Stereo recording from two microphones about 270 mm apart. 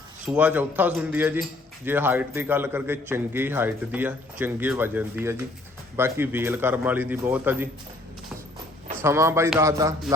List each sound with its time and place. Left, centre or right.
0.3 s a man's voice: centre
9.0 s a man's voice: centre